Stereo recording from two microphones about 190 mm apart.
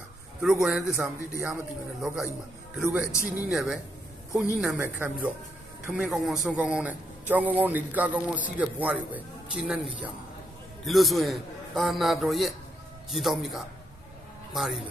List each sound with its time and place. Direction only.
0.4 s a man's voice: 5° right (ahead or behind)
10.9 s a man's voice: centre (ahead or behind)